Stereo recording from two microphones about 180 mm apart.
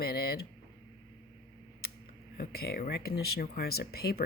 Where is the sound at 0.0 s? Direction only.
60° left (ahead or behind).